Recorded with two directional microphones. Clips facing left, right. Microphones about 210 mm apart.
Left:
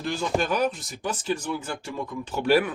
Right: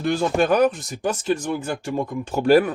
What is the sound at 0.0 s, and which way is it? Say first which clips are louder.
Speech: right 6 dB; 60° right (ahead or behind).